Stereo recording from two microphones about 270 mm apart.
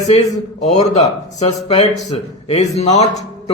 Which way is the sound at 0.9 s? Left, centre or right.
Left.